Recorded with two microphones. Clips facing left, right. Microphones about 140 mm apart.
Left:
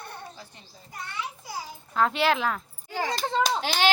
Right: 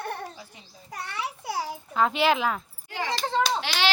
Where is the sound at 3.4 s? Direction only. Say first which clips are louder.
Left 2 dB; 45° left (ahead or behind).